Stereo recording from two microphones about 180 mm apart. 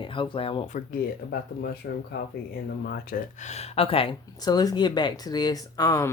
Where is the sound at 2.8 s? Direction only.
55° left (ahead or behind); by 6.1 s 15° left (ahead or behind).